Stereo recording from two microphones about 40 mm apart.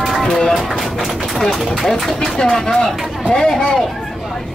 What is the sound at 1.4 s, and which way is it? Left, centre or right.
A man's voice, centre.